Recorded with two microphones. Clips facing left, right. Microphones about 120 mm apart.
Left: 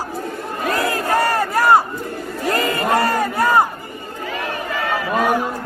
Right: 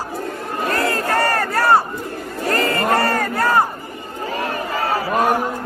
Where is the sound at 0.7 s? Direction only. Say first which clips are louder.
Left 1 dB; 15° left (ahead or behind).